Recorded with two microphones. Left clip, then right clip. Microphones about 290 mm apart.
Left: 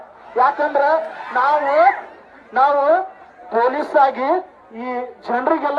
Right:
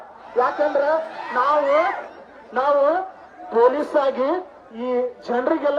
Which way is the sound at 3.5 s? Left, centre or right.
Centre.